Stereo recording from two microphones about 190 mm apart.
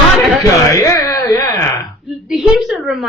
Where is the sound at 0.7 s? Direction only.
15° left (ahead or behind).